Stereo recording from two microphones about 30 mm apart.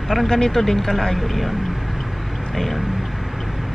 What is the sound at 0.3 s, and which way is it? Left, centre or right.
Speech, centre.